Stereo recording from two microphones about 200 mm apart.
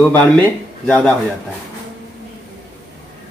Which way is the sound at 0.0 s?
5° left (ahead or behind).